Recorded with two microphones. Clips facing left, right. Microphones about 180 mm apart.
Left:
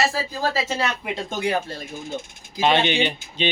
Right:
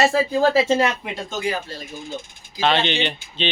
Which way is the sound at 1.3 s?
65° left (ahead or behind).